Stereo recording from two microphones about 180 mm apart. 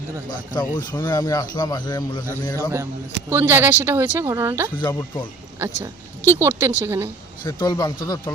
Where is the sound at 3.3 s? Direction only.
10° right (ahead or behind).